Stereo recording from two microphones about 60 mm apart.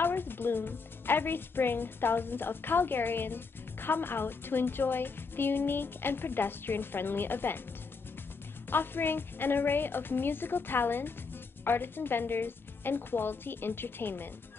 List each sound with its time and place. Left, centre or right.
0.0 s speech: left
8.6 s speech: left